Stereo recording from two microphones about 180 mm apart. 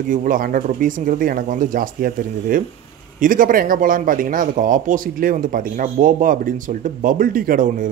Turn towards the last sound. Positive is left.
turn(degrees=-50)  # may be behind; listen again after turning